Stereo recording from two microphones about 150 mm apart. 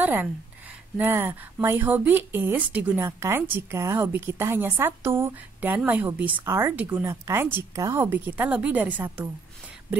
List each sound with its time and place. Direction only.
0.0 s speech: 10° right (ahead or behind)